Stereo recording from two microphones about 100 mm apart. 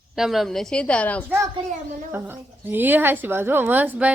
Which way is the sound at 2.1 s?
20° right (ahead or behind).